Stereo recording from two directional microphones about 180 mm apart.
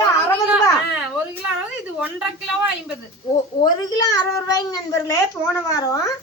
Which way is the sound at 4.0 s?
20° left (ahead or behind).